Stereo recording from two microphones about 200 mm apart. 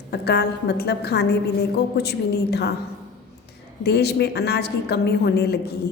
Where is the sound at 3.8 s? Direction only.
55° left (ahead or behind).